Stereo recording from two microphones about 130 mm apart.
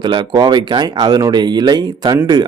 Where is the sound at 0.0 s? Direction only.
35° right (ahead or behind).